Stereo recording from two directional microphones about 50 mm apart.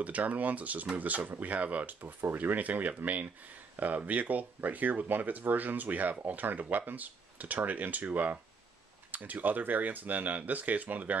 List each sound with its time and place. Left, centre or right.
0.0 s speech: right